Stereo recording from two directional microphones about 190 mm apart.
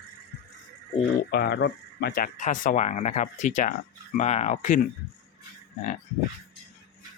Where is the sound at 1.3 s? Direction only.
60° left (ahead or behind); by 4.8 s 40° left (ahead or behind).